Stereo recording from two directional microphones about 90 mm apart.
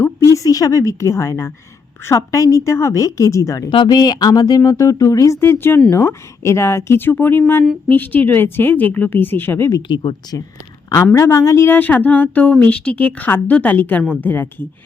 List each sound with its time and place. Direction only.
0.0 s a woman's voice: 35° left (ahead or behind)
3.8 s a woman's voice: 50° left (ahead or behind)
5.4 s a woman's voice: 25° left (ahead or behind)
9.9 s speech: 65° left (ahead or behind)
10.8 s a woman's voice: 35° left (ahead or behind)